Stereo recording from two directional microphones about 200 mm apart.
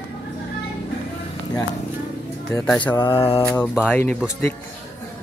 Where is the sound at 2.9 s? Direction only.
25° left (ahead or behind).